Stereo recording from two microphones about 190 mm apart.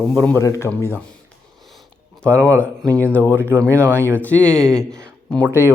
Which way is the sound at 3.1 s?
10° left (ahead or behind).